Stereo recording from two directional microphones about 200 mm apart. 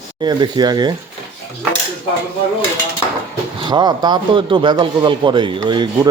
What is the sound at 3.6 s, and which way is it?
Speech, 20° right (ahead or behind).